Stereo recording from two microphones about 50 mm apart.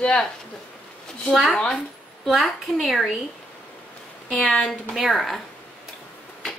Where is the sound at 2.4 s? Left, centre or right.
Centre.